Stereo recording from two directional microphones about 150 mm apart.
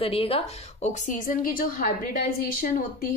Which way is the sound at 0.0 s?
40° left (ahead or behind).